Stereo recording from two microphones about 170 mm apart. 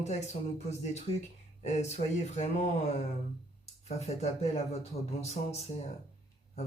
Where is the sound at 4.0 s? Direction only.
40° left (ahead or behind).